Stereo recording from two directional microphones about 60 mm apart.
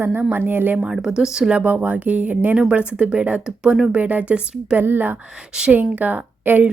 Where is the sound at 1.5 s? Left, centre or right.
Right.